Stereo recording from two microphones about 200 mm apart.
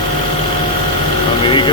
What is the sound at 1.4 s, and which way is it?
Speech, 25° left (ahead or behind).